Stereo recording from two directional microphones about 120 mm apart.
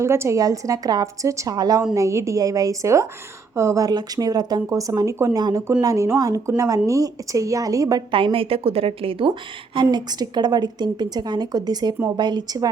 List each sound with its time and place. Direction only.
0.0 s a woman's voice: 20° right (ahead or behind)
8.1 s a woman's voice: 50° right (ahead or behind)
9.7 s a woman's voice: 35° right (ahead or behind)